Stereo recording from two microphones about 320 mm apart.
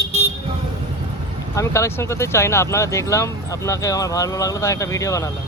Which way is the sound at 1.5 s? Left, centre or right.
Centre.